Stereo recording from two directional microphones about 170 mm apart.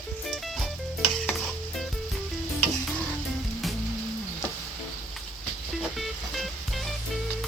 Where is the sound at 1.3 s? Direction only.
Centre (ahead or behind).